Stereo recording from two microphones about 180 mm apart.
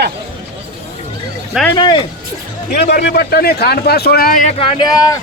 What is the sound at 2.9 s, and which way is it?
Speech, 65° left (ahead or behind).